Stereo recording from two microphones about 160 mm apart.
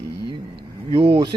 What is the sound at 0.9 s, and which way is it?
Speech, 35° right (ahead or behind).